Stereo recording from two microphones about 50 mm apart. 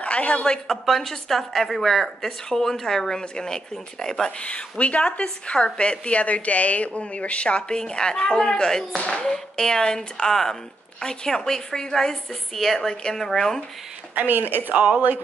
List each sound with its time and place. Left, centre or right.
0.0 s a woman's voice: left
0.7 s a woman's voice: centre
14.1 s a woman's voice: right